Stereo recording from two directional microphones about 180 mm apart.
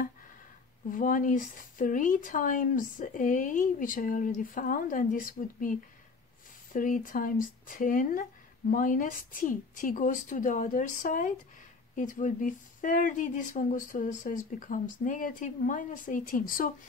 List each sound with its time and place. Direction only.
0.8 s speech: 50° left (ahead or behind)